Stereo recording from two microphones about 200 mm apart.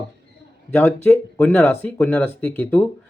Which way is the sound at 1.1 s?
5° left (ahead or behind).